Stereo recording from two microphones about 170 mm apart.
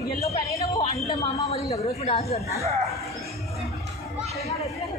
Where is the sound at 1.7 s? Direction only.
35° left (ahead or behind).